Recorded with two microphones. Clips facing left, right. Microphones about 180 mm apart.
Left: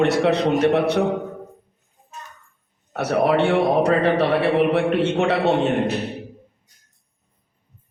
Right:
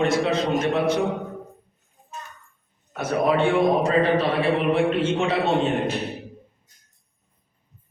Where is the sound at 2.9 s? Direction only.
70° left (ahead or behind).